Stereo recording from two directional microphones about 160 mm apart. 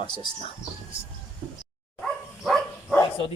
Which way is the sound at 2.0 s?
5° left (ahead or behind).